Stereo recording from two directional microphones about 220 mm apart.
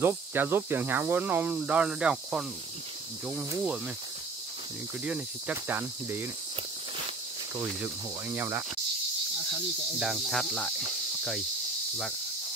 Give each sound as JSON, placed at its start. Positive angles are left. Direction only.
{"t": 0.0, "sound": "speech", "side_deg": -10}
{"t": 3.3, "sound": "snake", "side_deg": -5}
{"t": 5.0, "sound": "speech", "side_deg": -5}
{"t": 7.5, "sound": "speech", "side_deg": -10}
{"t": 9.9, "sound": "snake", "side_deg": 0}